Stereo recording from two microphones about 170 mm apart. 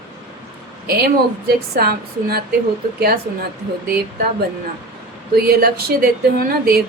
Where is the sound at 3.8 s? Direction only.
60° right (ahead or behind).